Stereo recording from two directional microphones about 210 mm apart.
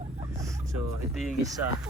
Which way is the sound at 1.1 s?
Centre (ahead or behind).